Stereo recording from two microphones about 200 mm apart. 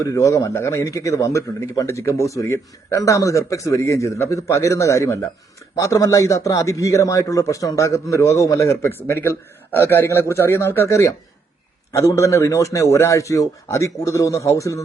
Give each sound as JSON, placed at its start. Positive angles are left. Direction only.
{"t": 0.0, "sound": "a man's voice", "side_deg": 15}